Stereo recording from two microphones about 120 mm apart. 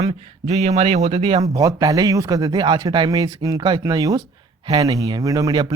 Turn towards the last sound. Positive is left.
turn(degrees=-35)  # may be behind; listen again after turning